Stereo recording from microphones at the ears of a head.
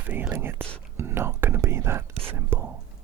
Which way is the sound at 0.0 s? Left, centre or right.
Right.